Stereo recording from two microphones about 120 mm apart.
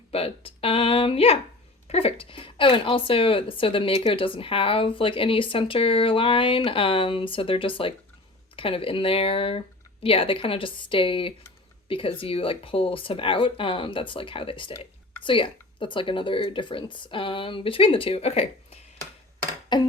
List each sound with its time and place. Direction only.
0.1 s speech: 55° left (ahead or behind)
19.7 s speech: 40° left (ahead or behind)